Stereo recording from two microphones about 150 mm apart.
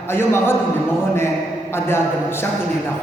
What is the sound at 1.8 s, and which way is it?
Speech, 15° left (ahead or behind).